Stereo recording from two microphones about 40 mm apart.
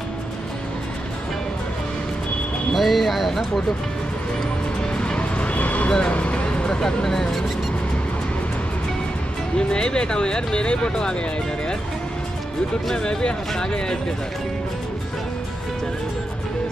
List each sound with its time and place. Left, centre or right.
2.7 s speech: centre
4.9 s music: left
5.5 s vehicle: left
5.9 s vehicle: left
6.1 s vehicle: left
6.8 s speech: centre
9.6 s speech: left
12.9 s speech: centre